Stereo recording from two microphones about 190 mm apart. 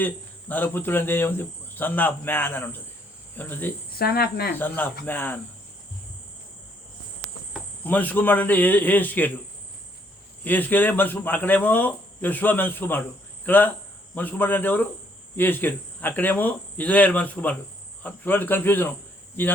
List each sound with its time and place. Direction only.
0.0 s speech: 10° left (ahead or behind)
3.9 s speech: 55° left (ahead or behind)
4.5 s speech: 10° left (ahead or behind)
7.9 s speech: 10° left (ahead or behind)
10.4 s speech: 10° left (ahead or behind)